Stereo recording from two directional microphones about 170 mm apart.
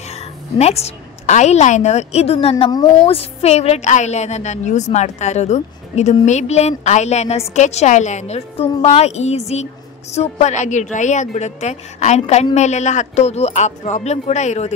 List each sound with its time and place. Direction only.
0.1 s a woman's voice: 40° left (ahead or behind)
2.6 s a woman's voice: 20° left (ahead or behind)
3.0 s a woman's voice: 35° left (ahead or behind)